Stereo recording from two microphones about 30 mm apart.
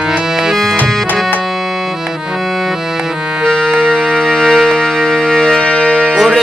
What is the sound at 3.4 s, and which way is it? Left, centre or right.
Music, centre.